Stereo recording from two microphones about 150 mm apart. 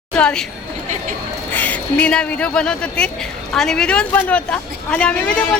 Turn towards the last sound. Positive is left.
turn(degrees=5)  # may be behind; listen again after turning